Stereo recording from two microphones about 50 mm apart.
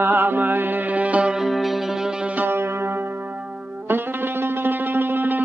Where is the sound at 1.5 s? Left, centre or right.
Centre.